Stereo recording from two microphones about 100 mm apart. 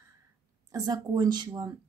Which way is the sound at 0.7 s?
40° right (ahead or behind).